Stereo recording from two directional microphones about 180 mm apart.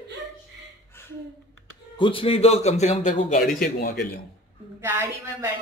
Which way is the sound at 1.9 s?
30° left (ahead or behind).